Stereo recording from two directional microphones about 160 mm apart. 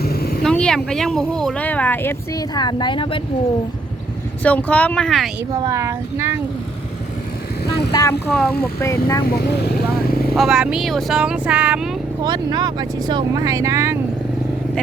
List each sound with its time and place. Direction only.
0.0 s vehicle: 70° left (ahead or behind)
0.4 s speech: 5° left (ahead or behind)
2.6 s speech: 25° left (ahead or behind)
4.4 s speech: 10° left (ahead or behind)
5.6 s speech: 20° right (ahead or behind)
7.9 s speech: 25° left (ahead or behind)
8.3 s speech: 5° left (ahead or behind)
8.8 s speech: 20° left (ahead or behind)
9.5 s speech: 75° left (ahead or behind)
10.3 s speech: 5° right (ahead or behind)
12.2 s speech: 25° right (ahead or behind)